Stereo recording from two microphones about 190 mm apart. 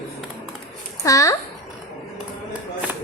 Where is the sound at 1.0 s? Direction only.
15° left (ahead or behind).